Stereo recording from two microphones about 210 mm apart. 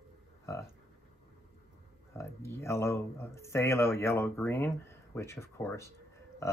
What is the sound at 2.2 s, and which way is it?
Speech, 15° left (ahead or behind).